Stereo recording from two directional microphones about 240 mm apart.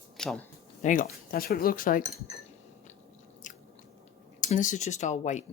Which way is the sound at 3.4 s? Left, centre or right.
Left.